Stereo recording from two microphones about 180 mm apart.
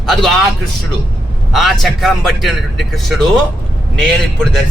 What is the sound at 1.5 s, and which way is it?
A man's voice, centre (ahead or behind).